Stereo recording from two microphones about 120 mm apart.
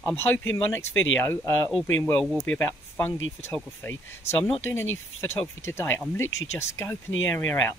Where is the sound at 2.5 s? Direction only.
15° left (ahead or behind).